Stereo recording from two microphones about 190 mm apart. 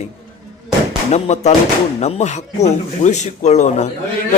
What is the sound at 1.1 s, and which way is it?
A man's voice, 35° left (ahead or behind).